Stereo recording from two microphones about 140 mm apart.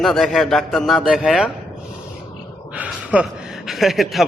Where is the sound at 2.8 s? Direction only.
10° right (ahead or behind).